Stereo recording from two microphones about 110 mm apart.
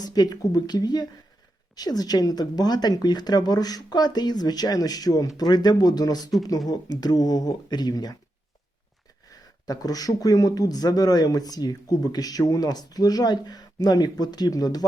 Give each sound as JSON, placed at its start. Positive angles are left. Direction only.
{"t": 0.0, "sound": "speech", "side_deg": 40}
{"t": 9.6, "sound": "speech", "side_deg": 35}